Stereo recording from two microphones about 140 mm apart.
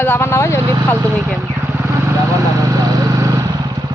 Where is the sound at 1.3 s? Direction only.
20° right (ahead or behind).